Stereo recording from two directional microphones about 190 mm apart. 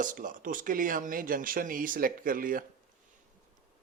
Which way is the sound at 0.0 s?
45° right (ahead or behind).